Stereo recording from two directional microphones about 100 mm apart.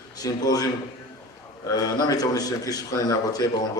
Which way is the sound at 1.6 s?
40° left (ahead or behind).